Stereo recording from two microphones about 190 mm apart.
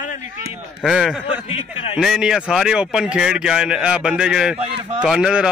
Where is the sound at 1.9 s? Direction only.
5° right (ahead or behind).